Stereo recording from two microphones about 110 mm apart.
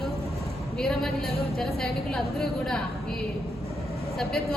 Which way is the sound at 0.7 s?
5° left (ahead or behind).